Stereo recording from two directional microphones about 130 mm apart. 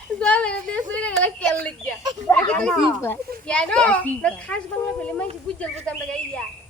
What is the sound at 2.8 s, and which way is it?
Speech, 20° left (ahead or behind).